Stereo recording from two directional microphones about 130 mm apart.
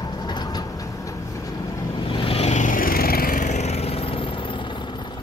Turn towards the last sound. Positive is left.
turn(degrees=40)  # may be behind; listen again after turning